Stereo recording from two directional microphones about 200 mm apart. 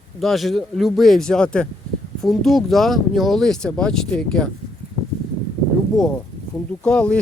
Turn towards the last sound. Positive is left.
turn(degrees=5)  # may be behind; listen again after turning